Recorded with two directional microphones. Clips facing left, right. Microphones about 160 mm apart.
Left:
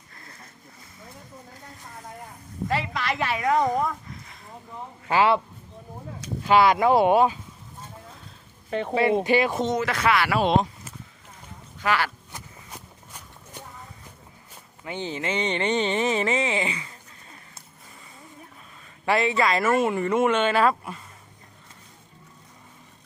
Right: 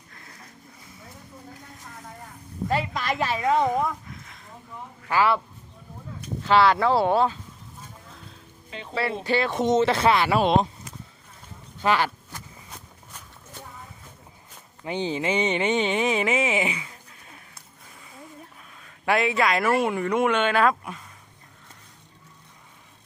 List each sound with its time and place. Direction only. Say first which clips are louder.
2.6 s a woman's voice: right 1 dB; 35° right (ahead or behind)
3.7 s a sound: even; 5° right (ahead or behind)
5.0 s speech: left 2 dB; 20° left (ahead or behind)
6.4 s speech: left 1 dB; 10° left (ahead or behind)
8.7 s speech: left 12 dB; 55° left (ahead or behind)
9.2 s speech: left 3 dB; 15° left (ahead or behind)
9.6 s speech: right 4 dB; 25° right (ahead or behind)
11.8 s speech: right 2 dB; 20° right (ahead or behind)
12.3 s a sound: even; 10° left (ahead or behind)
14.8 s speech: right 4 dB; 15° right (ahead or behind)
18.8 s speech: even; centre (ahead or behind)